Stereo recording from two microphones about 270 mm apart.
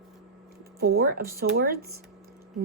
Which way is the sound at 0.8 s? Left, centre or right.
Right.